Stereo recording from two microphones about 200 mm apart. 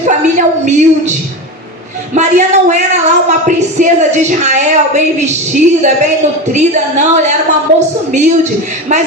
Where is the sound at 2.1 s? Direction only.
35° right (ahead or behind).